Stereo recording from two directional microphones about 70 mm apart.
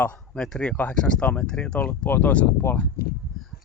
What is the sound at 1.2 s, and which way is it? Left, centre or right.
Speech, left.